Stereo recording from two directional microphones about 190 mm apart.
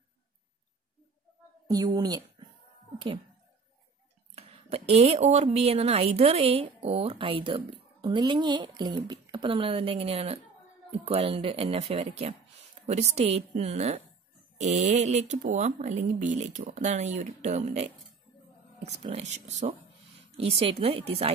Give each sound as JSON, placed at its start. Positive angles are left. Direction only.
{"t": 2.0, "sound": "speech", "side_deg": -20}
{"t": 4.4, "sound": "speech", "side_deg": -30}